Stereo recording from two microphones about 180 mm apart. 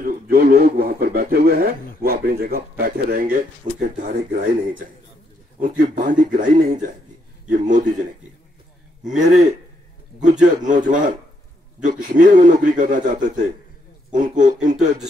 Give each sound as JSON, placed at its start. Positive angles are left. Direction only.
{"t": 0.0, "sound": "a man's voice", "side_deg": -55}
{"t": 9.0, "sound": "speech", "side_deg": -45}
{"t": 10.7, "sound": "speech", "side_deg": -45}